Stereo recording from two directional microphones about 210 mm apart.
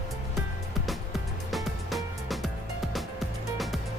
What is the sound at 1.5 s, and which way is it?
Music, centre (ahead or behind).